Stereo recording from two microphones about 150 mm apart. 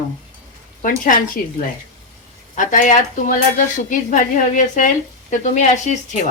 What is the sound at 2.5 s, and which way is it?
A woman's voice, 60° left (ahead or behind).